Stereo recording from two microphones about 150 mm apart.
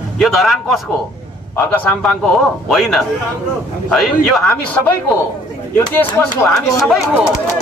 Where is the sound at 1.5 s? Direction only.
15° left (ahead or behind).